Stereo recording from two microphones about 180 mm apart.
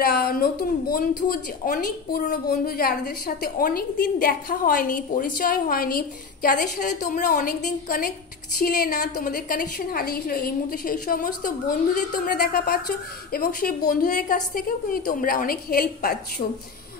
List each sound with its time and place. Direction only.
0.0 s a woman's voice: 55° left (ahead or behind)